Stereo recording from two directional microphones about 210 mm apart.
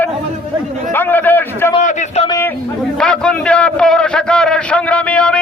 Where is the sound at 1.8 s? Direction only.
35° left (ahead or behind).